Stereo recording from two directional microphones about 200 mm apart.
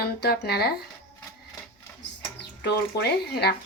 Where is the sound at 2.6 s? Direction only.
55° left (ahead or behind).